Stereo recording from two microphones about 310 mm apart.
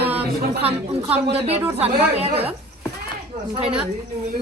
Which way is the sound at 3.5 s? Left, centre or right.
Centre.